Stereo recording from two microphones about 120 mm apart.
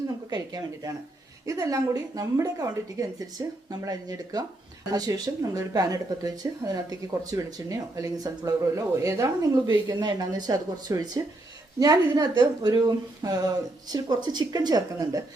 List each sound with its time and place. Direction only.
0.3 s speech: 35° right (ahead or behind)
9.6 s speech: 40° right (ahead or behind)